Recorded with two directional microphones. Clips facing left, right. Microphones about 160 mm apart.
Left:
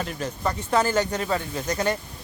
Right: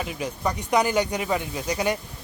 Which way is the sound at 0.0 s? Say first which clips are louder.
Even; 10° right (ahead or behind).